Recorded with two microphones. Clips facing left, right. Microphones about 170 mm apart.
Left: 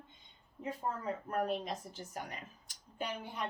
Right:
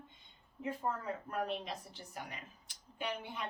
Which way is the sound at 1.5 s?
45° left (ahead or behind).